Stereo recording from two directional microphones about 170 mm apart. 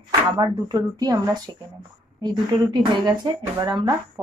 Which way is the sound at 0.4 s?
25° right (ahead or behind).